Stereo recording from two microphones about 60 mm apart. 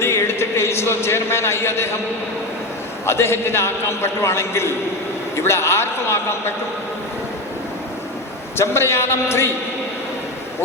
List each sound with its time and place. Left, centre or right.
0.0 s a sound: left
3.1 s a man's voice: left
8.5 s a man's voice: left